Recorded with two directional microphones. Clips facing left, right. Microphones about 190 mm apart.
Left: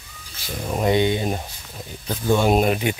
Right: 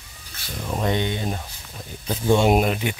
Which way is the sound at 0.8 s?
10° left (ahead or behind).